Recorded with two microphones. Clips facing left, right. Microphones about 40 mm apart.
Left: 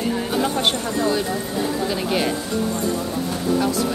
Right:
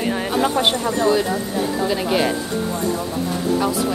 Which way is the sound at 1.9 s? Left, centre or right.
Centre.